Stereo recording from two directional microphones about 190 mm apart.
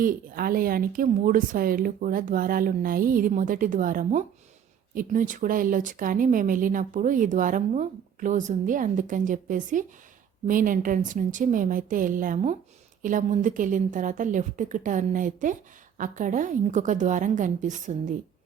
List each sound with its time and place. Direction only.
0.0 s a woman's voice: 50° right (ahead or behind)